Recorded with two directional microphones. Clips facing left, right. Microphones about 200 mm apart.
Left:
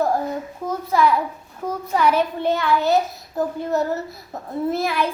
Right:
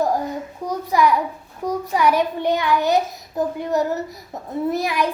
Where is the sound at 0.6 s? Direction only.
15° right (ahead or behind).